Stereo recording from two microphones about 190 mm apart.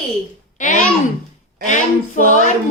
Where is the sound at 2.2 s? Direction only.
40° left (ahead or behind).